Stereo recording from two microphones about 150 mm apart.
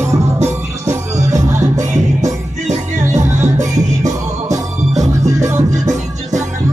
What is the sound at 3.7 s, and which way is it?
Music, 25° right (ahead or behind).